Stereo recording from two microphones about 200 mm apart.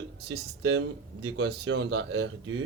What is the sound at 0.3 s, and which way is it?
Speech, 65° right (ahead or behind).